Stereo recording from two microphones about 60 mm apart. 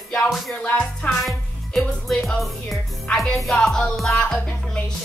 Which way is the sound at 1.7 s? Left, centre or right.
Centre.